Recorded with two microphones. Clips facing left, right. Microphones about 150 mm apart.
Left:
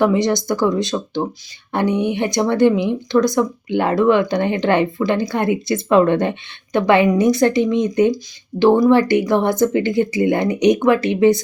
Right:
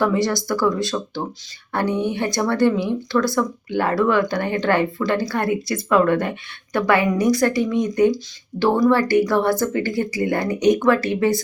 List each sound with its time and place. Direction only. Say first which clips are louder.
0.0 s speech: left 4 dB; 20° left (ahead or behind)